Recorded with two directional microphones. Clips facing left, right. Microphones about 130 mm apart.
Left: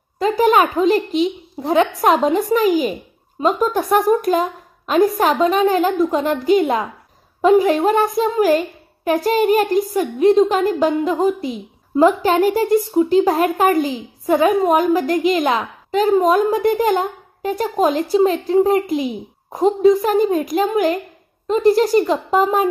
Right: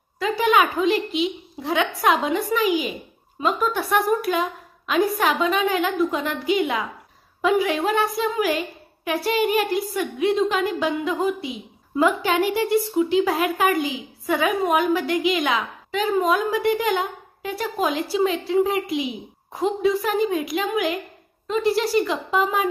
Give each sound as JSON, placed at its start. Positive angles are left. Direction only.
{"t": 0.2, "sound": "a woman's voice", "side_deg": 40}